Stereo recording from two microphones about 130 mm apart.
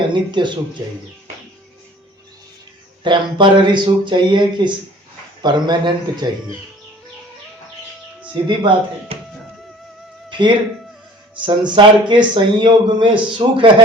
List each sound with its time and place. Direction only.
0.1 s speech: 35° right (ahead or behind)
3.0 s speech: 40° right (ahead or behind)
8.4 s speech: 40° right (ahead or behind)
10.2 s speech: 35° right (ahead or behind)